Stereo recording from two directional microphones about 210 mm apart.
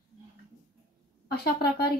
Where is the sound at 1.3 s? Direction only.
50° left (ahead or behind).